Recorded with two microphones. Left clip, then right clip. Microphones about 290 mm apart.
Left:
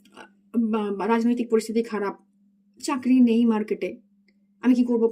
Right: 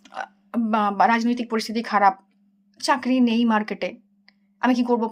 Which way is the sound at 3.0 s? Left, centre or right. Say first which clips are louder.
Left 1 dB; right.